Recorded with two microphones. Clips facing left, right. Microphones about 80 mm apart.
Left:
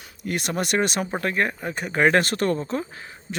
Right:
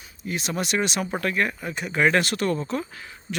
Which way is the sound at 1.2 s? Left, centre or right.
Left.